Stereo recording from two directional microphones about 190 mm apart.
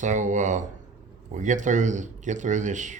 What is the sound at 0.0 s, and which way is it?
Speech, 40° right (ahead or behind).